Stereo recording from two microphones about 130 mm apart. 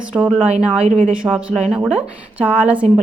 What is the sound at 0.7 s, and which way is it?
Speech, 55° right (ahead or behind).